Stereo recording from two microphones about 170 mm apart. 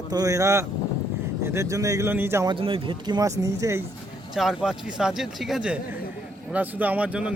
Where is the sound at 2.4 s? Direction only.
30° right (ahead or behind).